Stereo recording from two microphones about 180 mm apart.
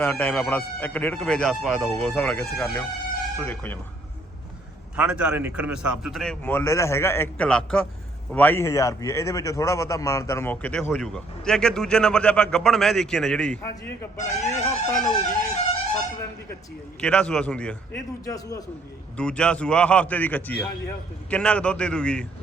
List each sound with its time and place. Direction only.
0.0 s a man's voice: 5° left (ahead or behind)
4.9 s a man's voice: 5° right (ahead or behind)
6.4 s speech: 10° left (ahead or behind)
14.2 s speech: 40° left (ahead or behind)
17.0 s a man's voice: 5° left (ahead or behind)
18.3 s a man's voice: 20° left (ahead or behind)
19.1 s a man's voice: 5° left (ahead or behind)